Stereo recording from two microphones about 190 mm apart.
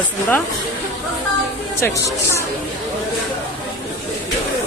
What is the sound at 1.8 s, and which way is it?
Speech, 15° left (ahead or behind).